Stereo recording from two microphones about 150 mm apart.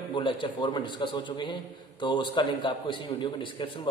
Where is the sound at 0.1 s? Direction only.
35° left (ahead or behind).